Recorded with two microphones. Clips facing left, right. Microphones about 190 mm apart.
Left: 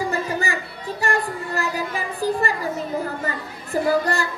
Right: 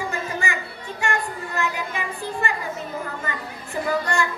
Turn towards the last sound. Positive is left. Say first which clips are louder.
# left 3 dB
turn(degrees=35)  # may be behind; listen again after turning